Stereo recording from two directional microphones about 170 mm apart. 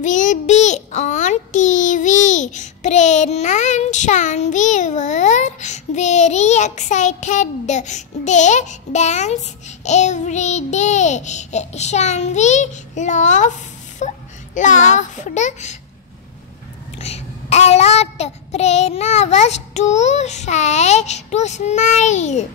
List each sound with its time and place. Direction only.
0.0 s a child's voice: 45° left (ahead or behind)
17.0 s a child's voice: 40° left (ahead or behind)